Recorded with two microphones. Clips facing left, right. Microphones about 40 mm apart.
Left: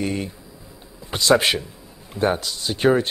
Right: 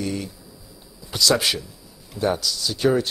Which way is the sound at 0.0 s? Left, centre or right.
Left.